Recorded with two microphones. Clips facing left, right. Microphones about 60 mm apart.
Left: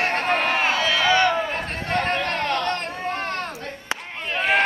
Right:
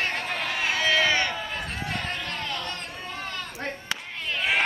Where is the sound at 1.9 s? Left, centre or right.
Left.